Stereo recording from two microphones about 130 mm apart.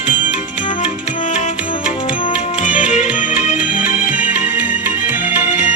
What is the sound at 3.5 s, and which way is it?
Music, 10° right (ahead or behind).